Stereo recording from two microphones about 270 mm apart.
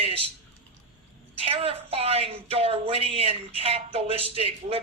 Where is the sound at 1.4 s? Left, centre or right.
Right.